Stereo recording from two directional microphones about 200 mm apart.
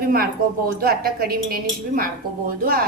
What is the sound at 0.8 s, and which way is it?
Speech, 50° right (ahead or behind).